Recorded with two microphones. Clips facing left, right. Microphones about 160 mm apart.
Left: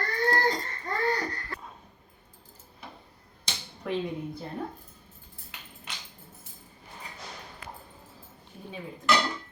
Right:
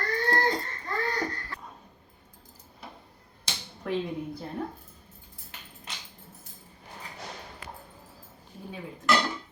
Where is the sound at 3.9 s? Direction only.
Centre (ahead or behind).